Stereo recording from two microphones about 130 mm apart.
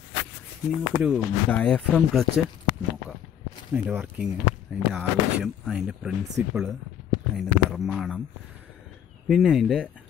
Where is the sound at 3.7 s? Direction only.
15° right (ahead or behind).